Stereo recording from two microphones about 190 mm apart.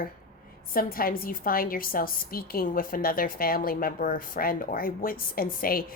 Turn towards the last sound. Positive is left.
turn(degrees=50)  # may be behind; listen again after turning